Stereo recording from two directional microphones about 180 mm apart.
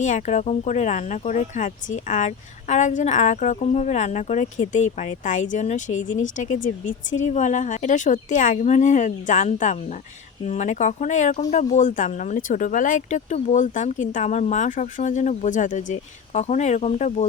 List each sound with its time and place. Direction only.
0.0 s speech: 40° left (ahead or behind)